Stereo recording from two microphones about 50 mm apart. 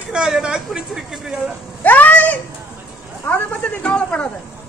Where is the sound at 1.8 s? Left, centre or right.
Left.